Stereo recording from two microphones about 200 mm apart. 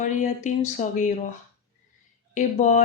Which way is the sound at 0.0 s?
35° left (ahead or behind).